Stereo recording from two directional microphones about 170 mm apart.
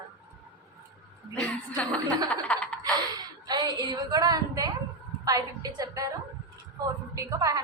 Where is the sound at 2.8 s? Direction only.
25° right (ahead or behind).